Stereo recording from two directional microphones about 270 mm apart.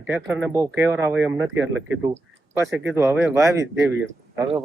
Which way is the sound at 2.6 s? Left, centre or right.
Centre.